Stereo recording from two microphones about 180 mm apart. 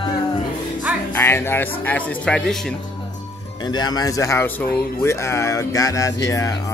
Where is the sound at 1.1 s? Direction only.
15° left (ahead or behind).